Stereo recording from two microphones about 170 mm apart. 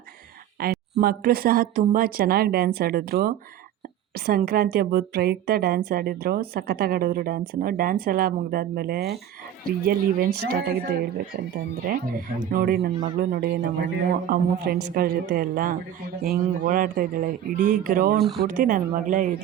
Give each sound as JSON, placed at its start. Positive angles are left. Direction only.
{"t": 0.6, "sound": "a woman's voice", "side_deg": -60}
{"t": 11.9, "sound": "a woman's voice", "side_deg": -55}